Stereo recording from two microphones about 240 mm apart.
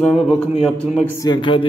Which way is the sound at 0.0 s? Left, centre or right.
Centre.